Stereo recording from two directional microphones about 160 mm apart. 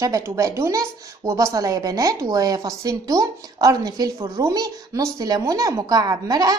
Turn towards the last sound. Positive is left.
turn(degrees=-25)  # may be behind; listen again after turning